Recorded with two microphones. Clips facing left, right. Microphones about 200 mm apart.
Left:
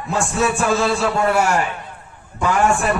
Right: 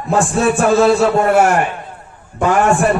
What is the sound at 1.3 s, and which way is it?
Speech, 55° right (ahead or behind).